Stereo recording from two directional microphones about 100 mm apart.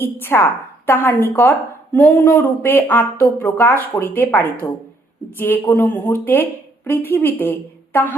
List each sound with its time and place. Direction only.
0.0 s a woman's voice: 20° left (ahead or behind)